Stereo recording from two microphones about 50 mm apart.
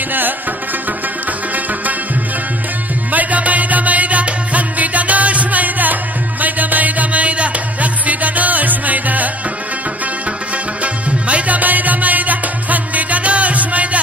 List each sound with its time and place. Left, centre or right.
3.1 s music: right
10.8 s music: right